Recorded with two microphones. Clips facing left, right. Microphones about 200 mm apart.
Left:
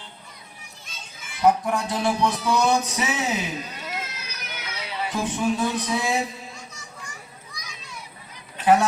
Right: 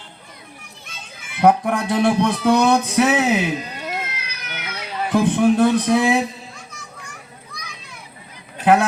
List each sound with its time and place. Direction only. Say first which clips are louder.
0.9 s a child's voice: right 2 dB; 60° right (ahead or behind)
7.5 s children playing: right 4 dB; 55° right (ahead or behind)